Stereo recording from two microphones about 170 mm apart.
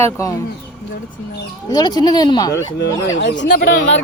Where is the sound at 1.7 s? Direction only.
25° left (ahead or behind).